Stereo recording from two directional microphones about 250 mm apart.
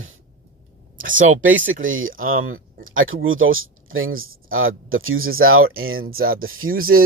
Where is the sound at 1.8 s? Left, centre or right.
Right.